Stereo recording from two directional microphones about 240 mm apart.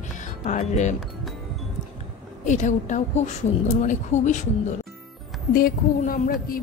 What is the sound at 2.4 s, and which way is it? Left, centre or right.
Speech, left.